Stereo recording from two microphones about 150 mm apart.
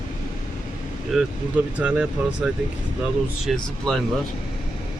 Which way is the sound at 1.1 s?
5° right (ahead or behind).